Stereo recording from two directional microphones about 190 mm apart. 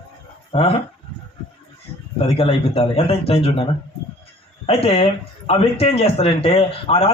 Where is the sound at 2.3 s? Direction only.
30° left (ahead or behind).